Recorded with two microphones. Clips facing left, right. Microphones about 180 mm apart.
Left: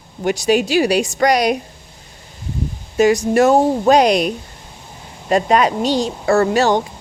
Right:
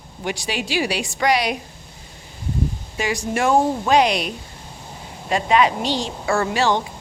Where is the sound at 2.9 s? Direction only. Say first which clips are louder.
Left 12 dB; 40° left (ahead or behind).